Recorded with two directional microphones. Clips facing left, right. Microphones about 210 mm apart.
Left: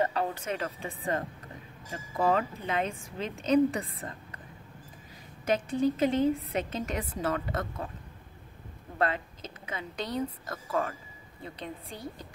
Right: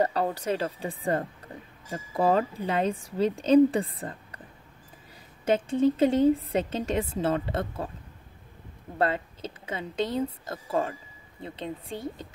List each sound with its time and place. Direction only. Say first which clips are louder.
0.0 s a woman's voice: right 4 dB; 35° right (ahead or behind)
5.4 s a woman's voice: right 4 dB; 25° right (ahead or behind)
8.9 s a woman's voice: right 3 dB; 30° right (ahead or behind)